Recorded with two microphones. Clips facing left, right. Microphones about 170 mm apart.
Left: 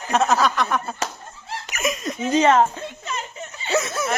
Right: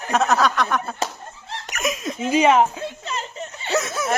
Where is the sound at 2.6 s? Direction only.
5° right (ahead or behind).